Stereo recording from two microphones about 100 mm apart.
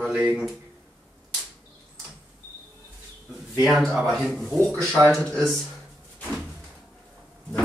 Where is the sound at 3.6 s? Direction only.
Centre (ahead or behind).